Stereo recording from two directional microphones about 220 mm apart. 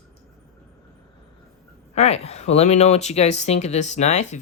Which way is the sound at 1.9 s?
30° left (ahead or behind).